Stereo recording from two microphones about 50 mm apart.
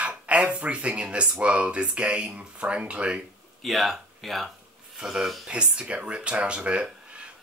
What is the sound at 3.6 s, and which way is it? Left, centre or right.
Speech, centre.